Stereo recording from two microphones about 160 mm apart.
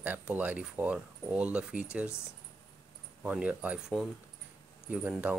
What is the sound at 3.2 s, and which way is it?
Speech, 10° right (ahead or behind).